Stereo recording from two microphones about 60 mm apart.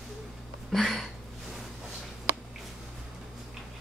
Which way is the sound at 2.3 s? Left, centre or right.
Right.